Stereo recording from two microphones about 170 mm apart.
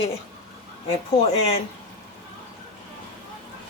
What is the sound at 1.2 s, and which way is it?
Speech, 35° left (ahead or behind).